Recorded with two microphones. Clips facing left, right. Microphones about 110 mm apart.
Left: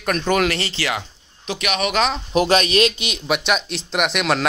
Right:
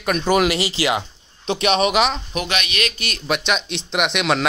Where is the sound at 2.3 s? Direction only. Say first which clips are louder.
Left 8 dB; 35° left (ahead or behind).